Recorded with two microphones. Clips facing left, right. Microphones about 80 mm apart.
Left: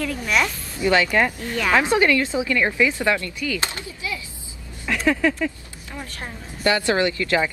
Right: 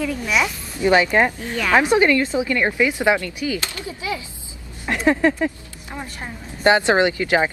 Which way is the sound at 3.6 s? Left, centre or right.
Left.